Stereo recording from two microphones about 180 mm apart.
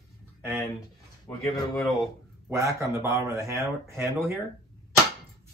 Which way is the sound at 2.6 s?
15° right (ahead or behind).